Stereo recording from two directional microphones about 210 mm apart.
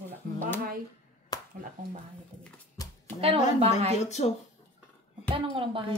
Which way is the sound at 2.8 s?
15° left (ahead or behind).